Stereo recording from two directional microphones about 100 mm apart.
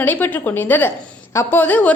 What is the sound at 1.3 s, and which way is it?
Speech, 20° left (ahead or behind).